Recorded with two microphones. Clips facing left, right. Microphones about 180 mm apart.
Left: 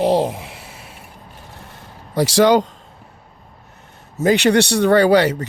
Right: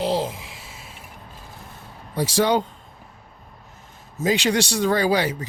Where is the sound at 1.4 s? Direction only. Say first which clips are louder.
Left 2 dB; 70° left (ahead or behind).